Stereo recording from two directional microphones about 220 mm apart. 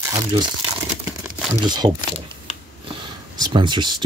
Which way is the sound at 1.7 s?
20° right (ahead or behind).